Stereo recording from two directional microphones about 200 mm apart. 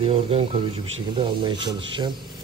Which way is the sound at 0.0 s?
30° right (ahead or behind).